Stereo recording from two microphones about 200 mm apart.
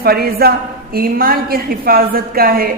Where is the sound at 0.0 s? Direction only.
50° right (ahead or behind).